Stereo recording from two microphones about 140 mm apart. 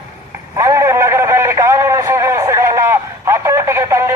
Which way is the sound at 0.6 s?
20° right (ahead or behind).